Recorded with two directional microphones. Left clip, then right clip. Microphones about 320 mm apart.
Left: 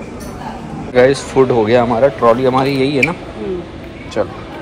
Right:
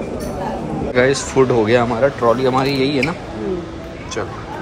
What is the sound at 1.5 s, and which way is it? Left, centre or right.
Speech, centre.